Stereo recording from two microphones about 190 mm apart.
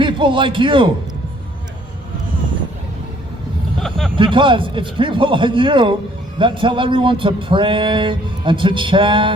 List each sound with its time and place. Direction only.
0.0 s a man's voice: 25° right (ahead or behind)
3.8 s vehicle: centre (ahead or behind)
4.1 s speech: 25° right (ahead or behind)